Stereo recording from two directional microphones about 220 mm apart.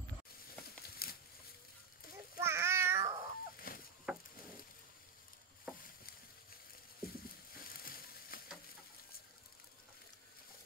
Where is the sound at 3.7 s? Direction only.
40° left (ahead or behind).